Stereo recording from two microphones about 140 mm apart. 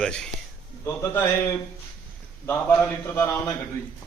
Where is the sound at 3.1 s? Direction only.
20° left (ahead or behind).